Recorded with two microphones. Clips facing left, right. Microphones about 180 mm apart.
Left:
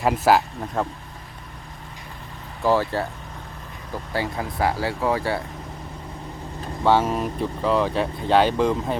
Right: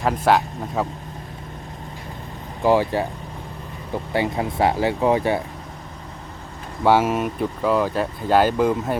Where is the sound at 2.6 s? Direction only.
15° right (ahead or behind).